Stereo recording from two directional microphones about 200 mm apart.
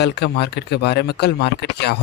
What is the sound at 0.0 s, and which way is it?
Speech, 55° left (ahead or behind).